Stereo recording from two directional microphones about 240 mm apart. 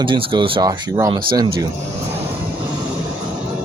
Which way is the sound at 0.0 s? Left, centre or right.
Right.